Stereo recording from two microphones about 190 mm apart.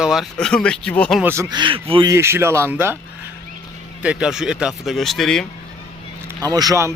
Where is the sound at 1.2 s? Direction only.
15° right (ahead or behind).